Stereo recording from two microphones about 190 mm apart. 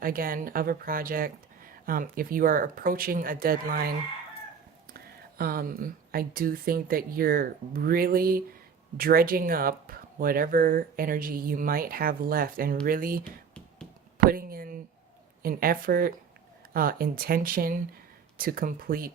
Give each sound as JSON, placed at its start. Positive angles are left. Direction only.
{"t": 0.0, "sound": "speech", "side_deg": -50}
{"t": 4.9, "sound": "speech", "side_deg": -50}
{"t": 14.3, "sound": "a sound", "side_deg": -50}
{"t": 15.4, "sound": "speech", "side_deg": -50}